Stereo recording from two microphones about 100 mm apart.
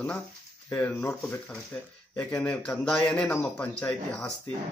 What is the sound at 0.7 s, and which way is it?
Speech, 20° left (ahead or behind).